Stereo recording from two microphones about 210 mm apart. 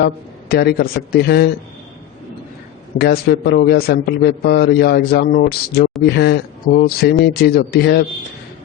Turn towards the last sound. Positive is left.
turn(degrees=50)  # may be behind; listen again after turning